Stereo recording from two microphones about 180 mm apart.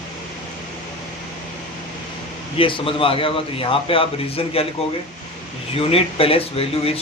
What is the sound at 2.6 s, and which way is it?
A man's voice, 30° left (ahead or behind).